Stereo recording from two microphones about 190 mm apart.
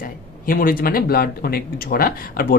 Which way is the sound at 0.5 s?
45° left (ahead or behind).